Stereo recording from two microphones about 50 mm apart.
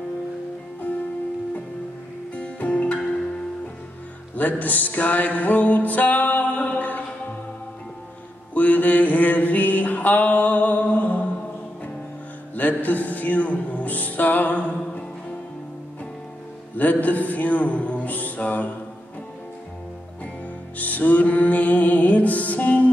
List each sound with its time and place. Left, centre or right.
2.3 s music: left
4.4 s music: left
8.5 s mantra: left
12.5 s music: left
16.7 s a man's voice: left
20.7 s music: left